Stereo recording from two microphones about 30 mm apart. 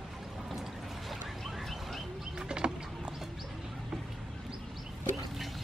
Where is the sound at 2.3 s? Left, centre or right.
Right.